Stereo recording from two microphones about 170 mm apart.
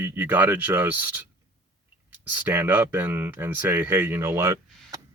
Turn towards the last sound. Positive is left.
turn(degrees=-15)  # may be behind; listen again after turning